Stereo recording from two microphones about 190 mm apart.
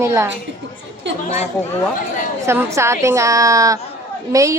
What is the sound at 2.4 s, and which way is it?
A woman's voice, 15° right (ahead or behind).